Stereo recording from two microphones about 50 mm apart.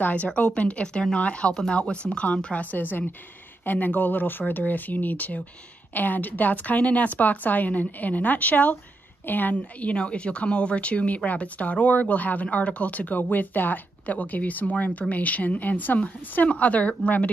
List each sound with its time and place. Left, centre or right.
0.0 s speech: left